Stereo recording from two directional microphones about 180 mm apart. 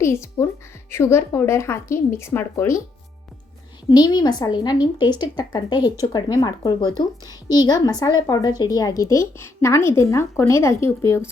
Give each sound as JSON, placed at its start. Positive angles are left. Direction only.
{"t": 0.0, "sound": "speech", "side_deg": 15}
{"t": 3.8, "sound": "a woman's voice", "side_deg": 25}